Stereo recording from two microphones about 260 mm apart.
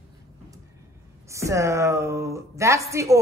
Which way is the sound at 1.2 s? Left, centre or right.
Centre.